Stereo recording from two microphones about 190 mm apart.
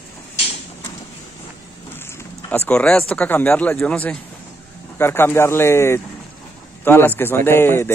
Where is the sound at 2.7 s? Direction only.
5° left (ahead or behind).